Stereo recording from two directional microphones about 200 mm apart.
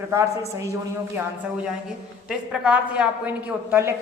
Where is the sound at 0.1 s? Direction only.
15° right (ahead or behind).